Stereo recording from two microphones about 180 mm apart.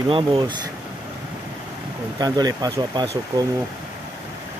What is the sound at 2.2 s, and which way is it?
Speech, 20° right (ahead or behind).